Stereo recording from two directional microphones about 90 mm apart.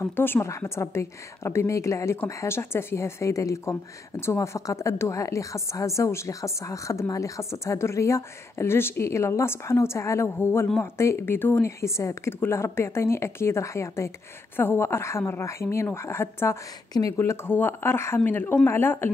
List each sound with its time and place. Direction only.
0.0 s a woman's voice: 25° left (ahead or behind)